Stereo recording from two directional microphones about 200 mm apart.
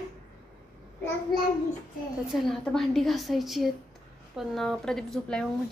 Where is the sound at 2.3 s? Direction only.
Centre (ahead or behind).